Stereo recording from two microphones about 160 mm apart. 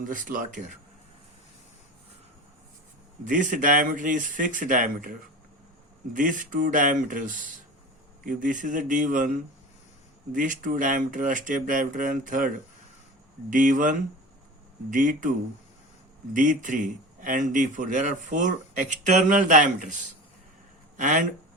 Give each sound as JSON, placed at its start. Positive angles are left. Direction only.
{"t": 0.0, "sound": "speech", "side_deg": -60}
{"t": 3.2, "sound": "speech", "side_deg": -55}
{"t": 6.1, "sound": "speech", "side_deg": -55}
{"t": 10.3, "sound": "speech", "side_deg": -55}
{"t": 16.3, "sound": "speech", "side_deg": -55}